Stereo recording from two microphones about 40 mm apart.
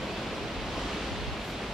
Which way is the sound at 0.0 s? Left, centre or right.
Centre.